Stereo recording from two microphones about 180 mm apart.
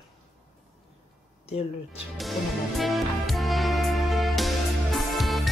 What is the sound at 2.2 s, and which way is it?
Music, centre (ahead or behind).